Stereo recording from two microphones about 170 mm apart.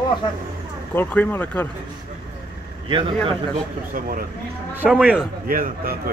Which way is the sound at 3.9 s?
55° right (ahead or behind).